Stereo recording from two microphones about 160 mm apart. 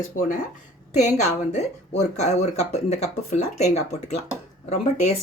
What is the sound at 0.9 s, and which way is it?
Speech, 45° left (ahead or behind).